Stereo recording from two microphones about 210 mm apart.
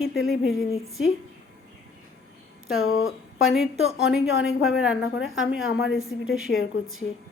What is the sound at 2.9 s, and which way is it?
Speech, 75° left (ahead or behind).